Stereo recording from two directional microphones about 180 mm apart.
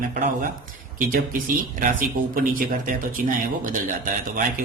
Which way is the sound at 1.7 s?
50° right (ahead or behind).